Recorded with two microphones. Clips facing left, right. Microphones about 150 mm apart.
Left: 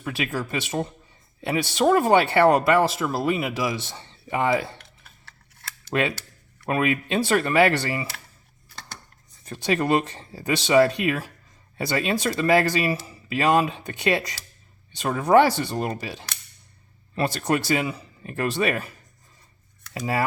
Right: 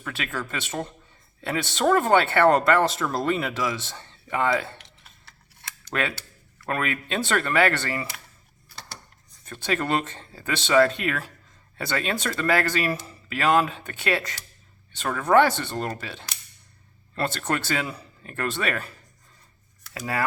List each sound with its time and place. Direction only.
0.0 s speech: 15° left (ahead or behind)
5.9 s speech: 20° left (ahead or behind)
9.4 s speech: 20° left (ahead or behind)